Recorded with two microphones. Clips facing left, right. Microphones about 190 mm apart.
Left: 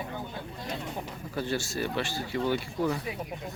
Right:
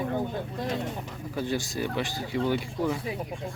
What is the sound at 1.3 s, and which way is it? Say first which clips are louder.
Speech: right 1 dB; 15° right (ahead or behind).